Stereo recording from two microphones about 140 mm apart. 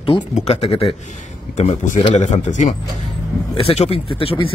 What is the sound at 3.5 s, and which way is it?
Speech, 45° left (ahead or behind).